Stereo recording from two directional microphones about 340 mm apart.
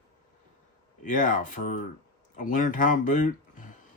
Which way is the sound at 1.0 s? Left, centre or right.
Left.